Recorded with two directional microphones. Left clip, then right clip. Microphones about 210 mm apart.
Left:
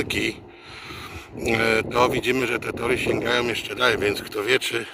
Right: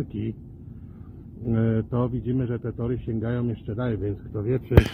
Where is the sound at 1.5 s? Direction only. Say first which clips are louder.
Left 7 dB; 30° left (ahead or behind).